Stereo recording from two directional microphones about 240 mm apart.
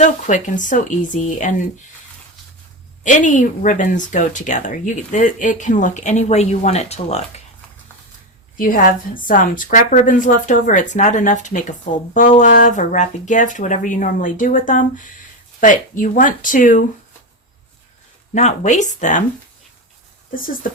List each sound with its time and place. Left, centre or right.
0.0 s speech: left
3.0 s speech: left
8.5 s speech: left
18.3 s speech: left
20.3 s speech: left